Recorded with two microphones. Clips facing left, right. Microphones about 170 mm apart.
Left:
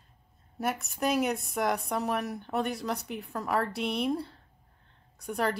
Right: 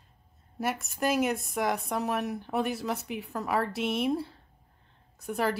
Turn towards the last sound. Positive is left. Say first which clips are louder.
# right 1 dB
turn(degrees=0)  # may be behind; listen again after turning